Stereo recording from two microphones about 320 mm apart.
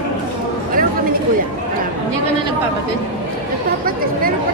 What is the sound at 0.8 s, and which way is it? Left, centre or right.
Speech, right.